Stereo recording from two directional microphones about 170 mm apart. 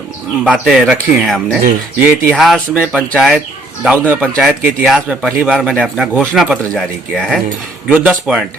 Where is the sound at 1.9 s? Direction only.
10° right (ahead or behind).